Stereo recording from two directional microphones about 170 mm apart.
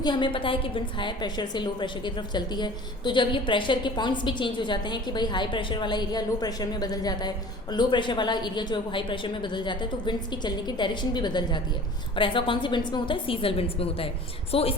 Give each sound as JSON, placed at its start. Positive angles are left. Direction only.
{"t": 0.0, "sound": "a woman's voice", "side_deg": 25}